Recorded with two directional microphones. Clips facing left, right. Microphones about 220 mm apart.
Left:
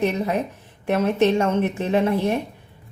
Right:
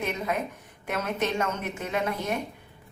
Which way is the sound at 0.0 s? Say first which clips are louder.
Left 7 dB; 35° left (ahead or behind).